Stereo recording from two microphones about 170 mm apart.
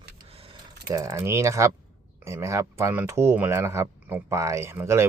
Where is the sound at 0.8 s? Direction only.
20° right (ahead or behind).